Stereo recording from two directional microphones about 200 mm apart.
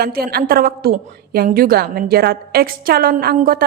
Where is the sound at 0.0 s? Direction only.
50° right (ahead or behind).